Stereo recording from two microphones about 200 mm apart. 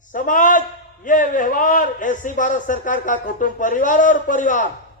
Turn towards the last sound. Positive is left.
turn(degrees=40)  # may be behind; listen again after turning